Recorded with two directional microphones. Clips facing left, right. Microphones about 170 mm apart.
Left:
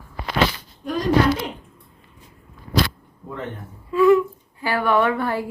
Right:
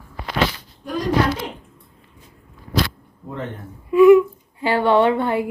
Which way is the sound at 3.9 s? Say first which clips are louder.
Right 5 dB; 15° right (ahead or behind).